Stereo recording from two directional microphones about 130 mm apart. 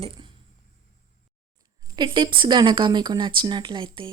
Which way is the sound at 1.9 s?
35° right (ahead or behind).